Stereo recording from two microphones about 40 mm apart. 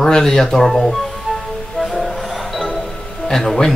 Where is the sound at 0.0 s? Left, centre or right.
Centre.